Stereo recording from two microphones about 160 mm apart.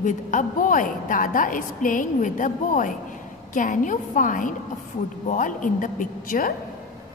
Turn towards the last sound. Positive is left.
turn(degrees=60)  # may be behind; listen again after turning